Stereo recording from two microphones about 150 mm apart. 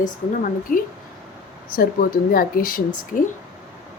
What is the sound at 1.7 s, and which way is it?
Speech, 75° left (ahead or behind).